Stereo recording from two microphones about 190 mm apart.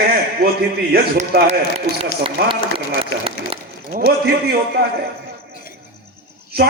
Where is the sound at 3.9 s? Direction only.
50° right (ahead or behind).